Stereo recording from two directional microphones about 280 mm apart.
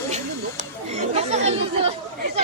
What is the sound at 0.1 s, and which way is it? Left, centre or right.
Chatter, right.